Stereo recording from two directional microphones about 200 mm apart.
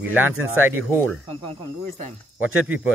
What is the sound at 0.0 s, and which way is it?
Speech, 10° right (ahead or behind).